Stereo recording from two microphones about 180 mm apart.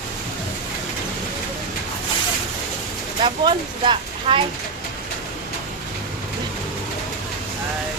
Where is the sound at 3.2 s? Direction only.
25° right (ahead or behind).